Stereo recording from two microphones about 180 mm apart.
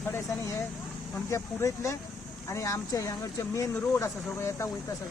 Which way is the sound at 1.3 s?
15° left (ahead or behind).